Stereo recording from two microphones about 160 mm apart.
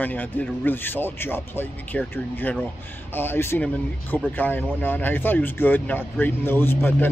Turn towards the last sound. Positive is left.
turn(degrees=15)  # may be behind; listen again after turning